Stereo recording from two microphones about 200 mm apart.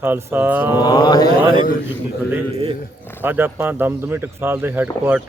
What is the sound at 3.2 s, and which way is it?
Speech, 10° right (ahead or behind).